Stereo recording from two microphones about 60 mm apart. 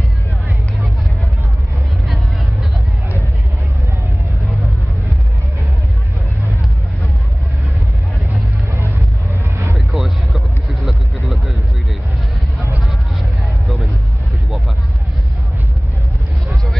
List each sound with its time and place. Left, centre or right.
9.3 s vehicle: right
9.9 s music: centre
10.9 s vehicle: centre